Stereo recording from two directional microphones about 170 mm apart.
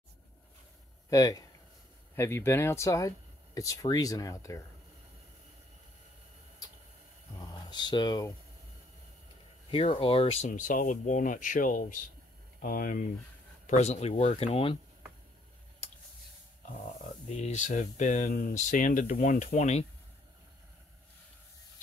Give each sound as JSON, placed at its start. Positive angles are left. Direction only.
{"t": 1.1, "sound": "speech", "side_deg": 20}
{"t": 7.3, "sound": "speech", "side_deg": 25}
{"t": 9.7, "sound": "speech", "side_deg": 35}
{"t": 10.5, "sound": "speech", "side_deg": 50}
{"t": 13.7, "sound": "speech", "side_deg": 40}
{"t": 17.4, "sound": "speech", "side_deg": 45}